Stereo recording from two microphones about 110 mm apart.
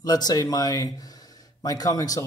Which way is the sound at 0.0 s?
35° left (ahead or behind).